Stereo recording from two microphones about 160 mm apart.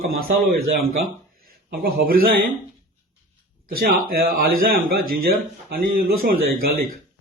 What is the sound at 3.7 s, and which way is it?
Speech, 65° right (ahead or behind).